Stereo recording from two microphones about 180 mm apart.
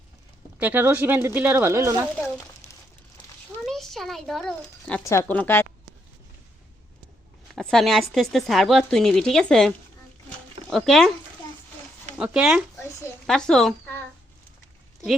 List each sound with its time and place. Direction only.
0.6 s speech: 10° right (ahead or behind)
3.6 s a child's voice: centre (ahead or behind)
5.0 s a woman's voice: 10° left (ahead or behind)
7.5 s speech: centre (ahead or behind)
12.1 s speech: 5° right (ahead or behind)